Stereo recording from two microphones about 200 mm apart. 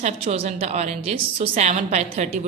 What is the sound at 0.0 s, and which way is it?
A woman's voice, 35° right (ahead or behind).